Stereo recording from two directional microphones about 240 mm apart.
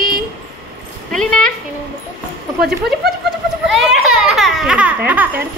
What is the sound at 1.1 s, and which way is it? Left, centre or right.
Speech, centre.